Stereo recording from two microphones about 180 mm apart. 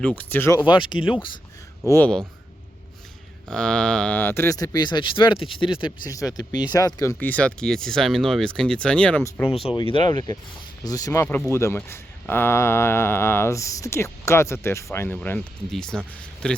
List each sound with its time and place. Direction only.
0.2 s speech: 10° left (ahead or behind)
0.6 s speech: 25° left (ahead or behind)
1.9 s speech: 10° left (ahead or behind)
3.5 s speech: 5° left (ahead or behind)
9.6 s speech: 30° left (ahead or behind); by 16.6 s 5° left (ahead or behind)